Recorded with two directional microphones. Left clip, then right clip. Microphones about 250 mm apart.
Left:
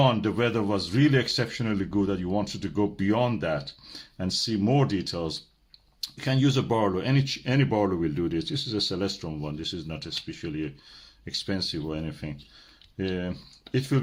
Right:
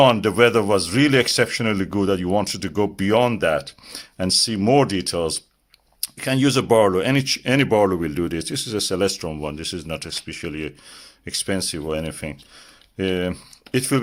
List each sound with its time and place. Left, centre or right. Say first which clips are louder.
0.0 s speech: right 9 dB; right